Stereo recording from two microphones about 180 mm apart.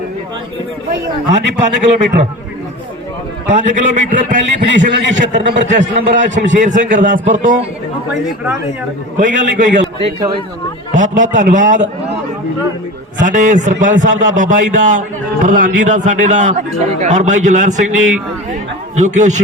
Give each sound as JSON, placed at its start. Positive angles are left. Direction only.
{"t": 1.3, "sound": "a man's voice", "side_deg": -40}
{"t": 3.4, "sound": "a man's voice", "side_deg": -40}
{"t": 9.1, "sound": "a man's voice", "side_deg": -45}
{"t": 10.2, "sound": "speech", "side_deg": -25}
{"t": 10.9, "sound": "a man's voice", "side_deg": -45}
{"t": 13.1, "sound": "a man's voice", "side_deg": -45}
{"t": 18.9, "sound": "a man's voice", "side_deg": -45}